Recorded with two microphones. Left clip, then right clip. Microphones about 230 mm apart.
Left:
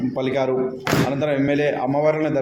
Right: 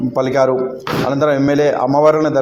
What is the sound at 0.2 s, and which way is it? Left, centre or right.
A man's voice, right.